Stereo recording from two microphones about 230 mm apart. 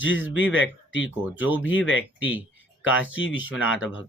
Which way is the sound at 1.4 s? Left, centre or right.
Centre.